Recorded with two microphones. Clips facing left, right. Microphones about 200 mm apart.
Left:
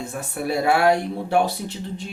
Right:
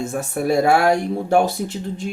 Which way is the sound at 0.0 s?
45° right (ahead or behind).